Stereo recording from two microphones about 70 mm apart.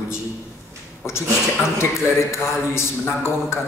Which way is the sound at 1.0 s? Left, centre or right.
Left.